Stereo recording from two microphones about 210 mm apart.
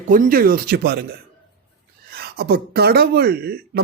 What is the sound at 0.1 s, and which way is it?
Speech, 40° right (ahead or behind).